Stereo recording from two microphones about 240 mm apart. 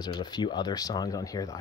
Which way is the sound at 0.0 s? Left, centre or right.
Centre.